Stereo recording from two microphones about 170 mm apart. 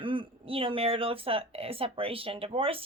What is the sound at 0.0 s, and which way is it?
A woman's voice, 30° right (ahead or behind).